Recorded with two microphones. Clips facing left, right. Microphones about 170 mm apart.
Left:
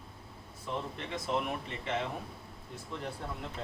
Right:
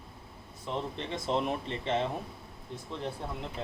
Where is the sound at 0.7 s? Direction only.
25° right (ahead or behind).